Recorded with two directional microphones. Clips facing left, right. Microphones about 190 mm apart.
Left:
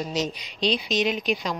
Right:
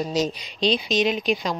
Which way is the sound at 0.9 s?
90° right.